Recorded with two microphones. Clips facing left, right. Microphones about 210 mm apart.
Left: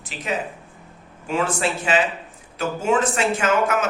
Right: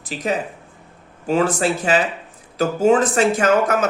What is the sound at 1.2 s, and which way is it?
Speech, 35° right (ahead or behind).